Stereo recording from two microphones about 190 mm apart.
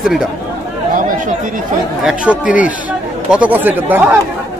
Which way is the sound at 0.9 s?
45° right (ahead or behind).